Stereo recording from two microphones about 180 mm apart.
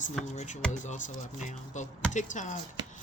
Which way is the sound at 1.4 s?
40° left (ahead or behind).